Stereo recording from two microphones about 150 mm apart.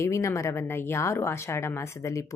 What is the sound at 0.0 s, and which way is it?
A woman's voice, 20° left (ahead or behind).